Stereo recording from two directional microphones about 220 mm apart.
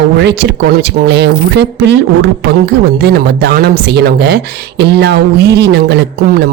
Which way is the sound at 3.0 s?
45° right (ahead or behind).